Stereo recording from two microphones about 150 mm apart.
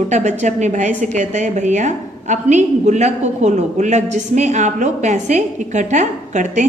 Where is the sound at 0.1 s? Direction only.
50° right (ahead or behind).